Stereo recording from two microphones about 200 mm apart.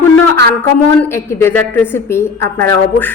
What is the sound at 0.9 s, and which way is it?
A woman's voice, 10° left (ahead or behind).